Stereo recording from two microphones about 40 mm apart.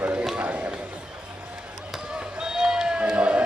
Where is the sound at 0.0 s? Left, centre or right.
Right.